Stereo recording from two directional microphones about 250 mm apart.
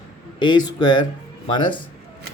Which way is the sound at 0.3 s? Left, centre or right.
Centre.